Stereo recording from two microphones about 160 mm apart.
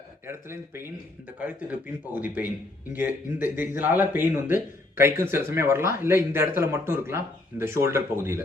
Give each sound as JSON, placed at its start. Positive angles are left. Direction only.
{"t": 0.3, "sound": "speech", "side_deg": -15}